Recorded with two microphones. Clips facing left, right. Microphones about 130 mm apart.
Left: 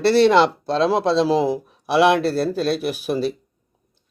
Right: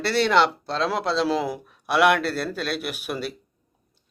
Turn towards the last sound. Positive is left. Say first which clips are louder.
# left 8 dB
turn(degrees=35)  # may be behind; listen again after turning